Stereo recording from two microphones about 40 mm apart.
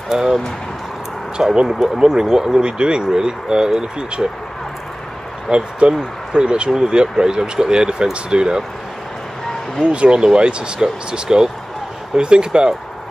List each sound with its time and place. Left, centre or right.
0.1 s speech: centre
1.7 s speech: centre
5.5 s speech: right
9.8 s speech: right